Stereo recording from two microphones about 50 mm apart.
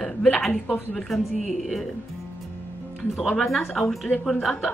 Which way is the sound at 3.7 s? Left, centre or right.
Centre.